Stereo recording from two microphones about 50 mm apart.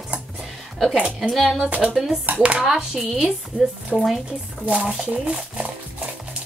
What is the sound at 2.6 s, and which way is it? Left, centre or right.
A woman's voice, centre.